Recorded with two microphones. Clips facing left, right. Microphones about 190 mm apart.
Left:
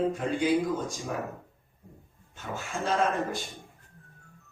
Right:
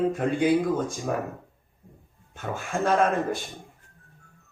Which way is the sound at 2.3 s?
55° right (ahead or behind).